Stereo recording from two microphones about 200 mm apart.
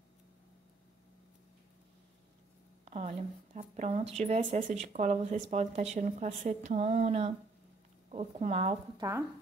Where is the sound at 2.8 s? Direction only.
30° right (ahead or behind).